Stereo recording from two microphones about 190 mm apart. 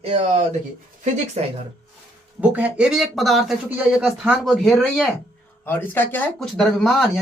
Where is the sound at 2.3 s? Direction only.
10° right (ahead or behind).